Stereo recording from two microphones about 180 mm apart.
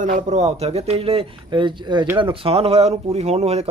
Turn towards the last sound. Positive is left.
turn(degrees=-35)  # may be behind; listen again after turning